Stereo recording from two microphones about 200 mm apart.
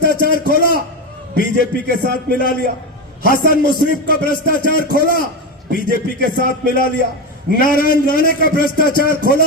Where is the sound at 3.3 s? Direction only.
45° left (ahead or behind).